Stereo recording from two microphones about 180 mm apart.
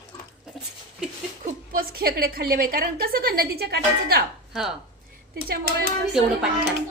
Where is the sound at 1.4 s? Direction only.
55° right (ahead or behind).